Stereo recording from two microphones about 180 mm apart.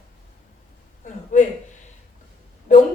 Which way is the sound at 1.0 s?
45° left (ahead or behind).